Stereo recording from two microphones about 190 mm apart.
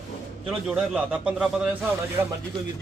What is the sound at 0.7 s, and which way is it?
A man's voice, 5° right (ahead or behind).